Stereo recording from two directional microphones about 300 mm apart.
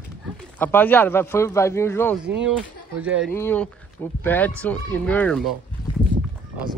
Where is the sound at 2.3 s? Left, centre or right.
Centre.